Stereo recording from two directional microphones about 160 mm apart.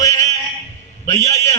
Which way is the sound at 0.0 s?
20° left (ahead or behind).